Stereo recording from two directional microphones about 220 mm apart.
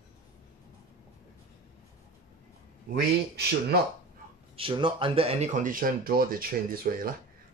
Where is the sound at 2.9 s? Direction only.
45° right (ahead or behind).